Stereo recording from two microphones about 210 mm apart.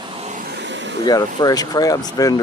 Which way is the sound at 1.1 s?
20° left (ahead or behind).